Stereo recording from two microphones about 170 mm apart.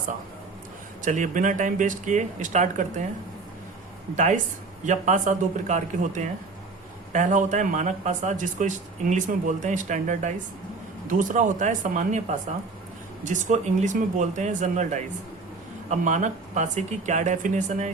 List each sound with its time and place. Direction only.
1.0 s a man's voice: 50° right (ahead or behind)
4.1 s a man's voice: 45° right (ahead or behind)